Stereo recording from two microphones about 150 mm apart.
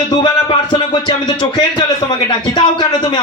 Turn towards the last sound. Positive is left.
turn(degrees=30)  # may be behind; listen again after turning